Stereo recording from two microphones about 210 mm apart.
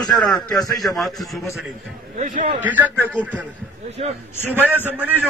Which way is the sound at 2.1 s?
40° right (ahead or behind).